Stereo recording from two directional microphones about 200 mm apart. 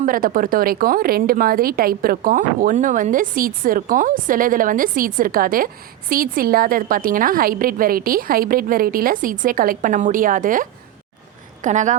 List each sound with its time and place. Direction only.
0.0 s a woman's voice: 45° right (ahead or behind)